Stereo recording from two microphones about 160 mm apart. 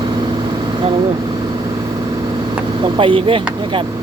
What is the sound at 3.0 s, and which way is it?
Speech, 35° right (ahead or behind).